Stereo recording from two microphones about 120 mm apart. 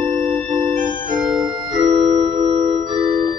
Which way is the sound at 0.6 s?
40° right (ahead or behind).